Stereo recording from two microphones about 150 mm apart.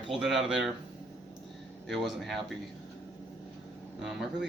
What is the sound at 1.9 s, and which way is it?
Speech, centre (ahead or behind).